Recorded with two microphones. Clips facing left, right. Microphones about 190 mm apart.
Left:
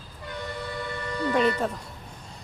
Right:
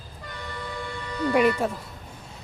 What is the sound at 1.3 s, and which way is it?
Speech, 10° right (ahead or behind).